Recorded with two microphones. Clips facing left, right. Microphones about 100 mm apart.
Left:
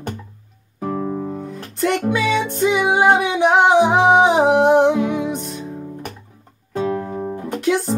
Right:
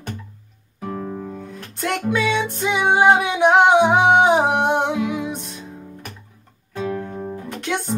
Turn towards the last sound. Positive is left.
turn(degrees=5)  # may be behind; listen again after turning